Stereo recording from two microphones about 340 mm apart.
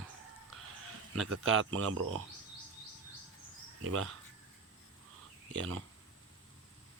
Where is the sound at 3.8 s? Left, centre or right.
Right.